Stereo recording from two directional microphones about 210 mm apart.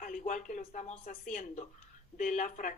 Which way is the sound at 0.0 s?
40° left (ahead or behind).